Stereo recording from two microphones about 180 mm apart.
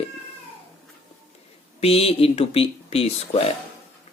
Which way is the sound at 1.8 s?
35° left (ahead or behind).